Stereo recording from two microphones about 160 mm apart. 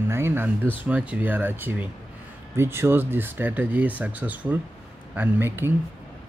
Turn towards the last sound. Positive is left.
turn(degrees=-15)  # may be behind; listen again after turning